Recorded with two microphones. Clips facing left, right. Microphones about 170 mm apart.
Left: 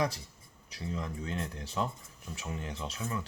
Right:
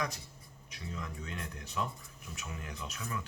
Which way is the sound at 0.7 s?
30° left (ahead or behind).